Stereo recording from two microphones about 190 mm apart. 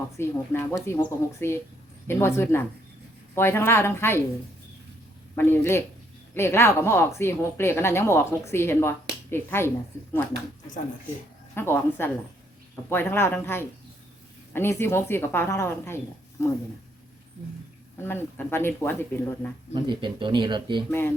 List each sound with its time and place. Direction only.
0.2 s speech: 15° left (ahead or behind)
5.3 s speech: 10° left (ahead or behind)
11.5 s speech: 10° left (ahead or behind)
18.0 s speech: 10° left (ahead or behind)
19.7 s speech: 25° right (ahead or behind)